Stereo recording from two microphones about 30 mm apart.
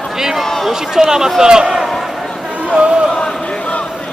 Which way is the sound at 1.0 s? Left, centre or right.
Centre.